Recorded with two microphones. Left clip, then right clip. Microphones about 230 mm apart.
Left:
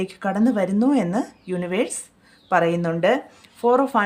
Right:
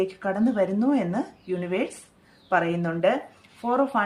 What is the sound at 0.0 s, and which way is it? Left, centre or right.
A woman's voice, left.